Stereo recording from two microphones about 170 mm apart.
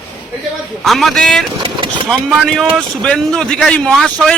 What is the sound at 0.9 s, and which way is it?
Speech, centre (ahead or behind).